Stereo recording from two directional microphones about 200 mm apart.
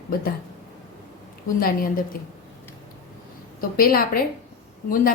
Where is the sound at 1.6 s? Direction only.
45° left (ahead or behind).